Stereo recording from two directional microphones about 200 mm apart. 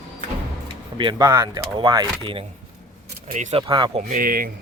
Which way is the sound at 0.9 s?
20° right (ahead or behind).